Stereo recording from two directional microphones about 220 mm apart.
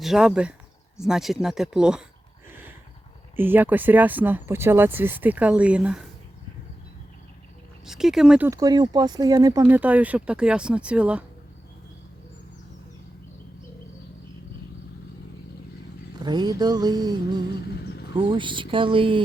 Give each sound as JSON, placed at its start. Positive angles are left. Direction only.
{"t": 0.0, "sound": "speech", "side_deg": 0}
{"t": 2.5, "sound": "a sound", "side_deg": -10}
{"t": 3.3, "sound": "speech", "side_deg": -10}
{"t": 7.9, "sound": "speech", "side_deg": 0}
{"t": 16.2, "sound": "speech", "side_deg": -20}